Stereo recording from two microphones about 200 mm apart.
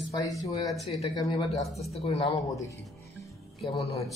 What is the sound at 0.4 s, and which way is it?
Speech, 15° left (ahead or behind).